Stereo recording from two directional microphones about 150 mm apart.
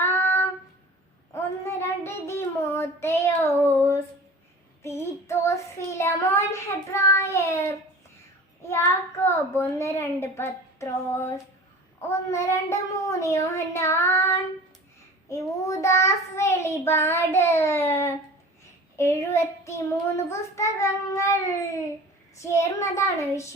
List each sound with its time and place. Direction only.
0.0 s child singing: 15° left (ahead or behind)
9.2 s a woman's voice: 15° left (ahead or behind)
12.0 s child singing: 20° left (ahead or behind)